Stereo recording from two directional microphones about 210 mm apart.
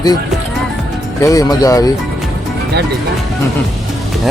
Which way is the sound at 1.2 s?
15° left (ahead or behind).